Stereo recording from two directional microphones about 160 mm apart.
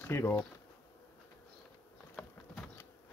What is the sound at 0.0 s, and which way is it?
Speech, 15° left (ahead or behind).